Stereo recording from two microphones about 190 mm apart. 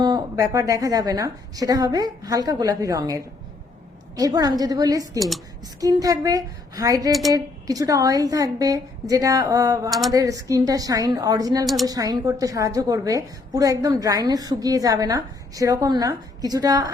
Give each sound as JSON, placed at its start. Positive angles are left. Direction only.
{"t": 0.0, "sound": "a woman's voice", "side_deg": -20}
{"t": 7.1, "sound": "speech", "side_deg": 0}
{"t": 7.3, "sound": "a woman's voice", "side_deg": -20}
{"t": 11.6, "sound": "speech", "side_deg": 0}
{"t": 11.9, "sound": "a woman's voice", "side_deg": -20}